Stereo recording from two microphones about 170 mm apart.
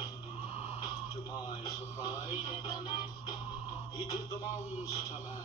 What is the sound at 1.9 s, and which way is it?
Music, 20° left (ahead or behind).